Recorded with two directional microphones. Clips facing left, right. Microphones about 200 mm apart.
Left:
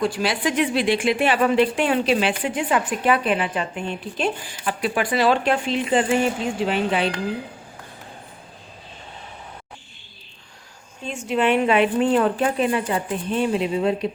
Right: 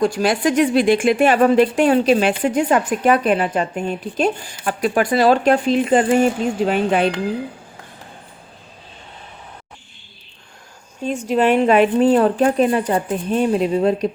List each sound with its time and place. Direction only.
0.0 s speech: 45° right (ahead or behind)
11.0 s speech: 40° right (ahead or behind)